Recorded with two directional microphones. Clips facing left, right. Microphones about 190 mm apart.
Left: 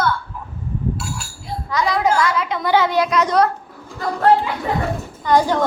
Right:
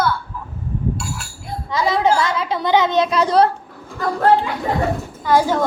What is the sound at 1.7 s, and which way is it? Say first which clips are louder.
A woman's voice: right 1 dB; 30° right (ahead or behind).